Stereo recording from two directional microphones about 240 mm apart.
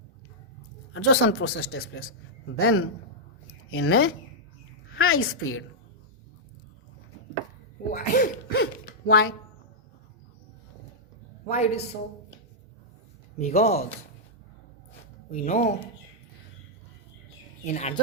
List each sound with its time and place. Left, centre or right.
0.9 s a man's voice: left
2.6 s a woman's voice: left
7.9 s a sound: left
11.4 s speech: left
13.4 s speech: left
15.3 s speech: left
17.7 s speech: left